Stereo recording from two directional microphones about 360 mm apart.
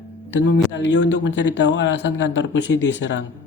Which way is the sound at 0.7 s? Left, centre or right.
Left.